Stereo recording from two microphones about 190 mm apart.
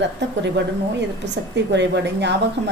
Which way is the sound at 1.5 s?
65° right (ahead or behind).